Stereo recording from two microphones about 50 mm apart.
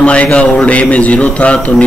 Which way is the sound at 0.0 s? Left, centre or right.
Left.